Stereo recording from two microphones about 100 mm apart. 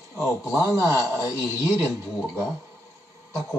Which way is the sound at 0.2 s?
25° left (ahead or behind).